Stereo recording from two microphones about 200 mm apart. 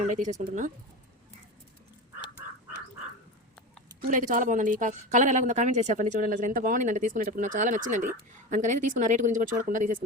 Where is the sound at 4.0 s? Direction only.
40° right (ahead or behind).